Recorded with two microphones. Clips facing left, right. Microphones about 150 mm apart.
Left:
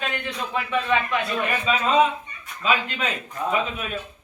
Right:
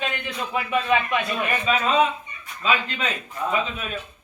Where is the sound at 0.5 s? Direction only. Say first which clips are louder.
Right 1 dB; 15° right (ahead or behind).